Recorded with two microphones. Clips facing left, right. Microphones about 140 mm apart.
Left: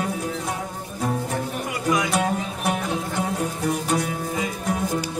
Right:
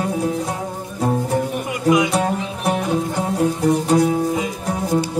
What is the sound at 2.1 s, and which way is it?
Music, 35° right (ahead or behind).